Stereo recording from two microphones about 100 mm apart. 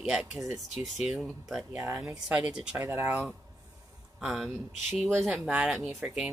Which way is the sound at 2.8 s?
20° right (ahead or behind).